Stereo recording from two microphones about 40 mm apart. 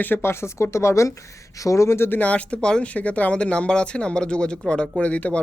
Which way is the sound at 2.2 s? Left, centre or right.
Left.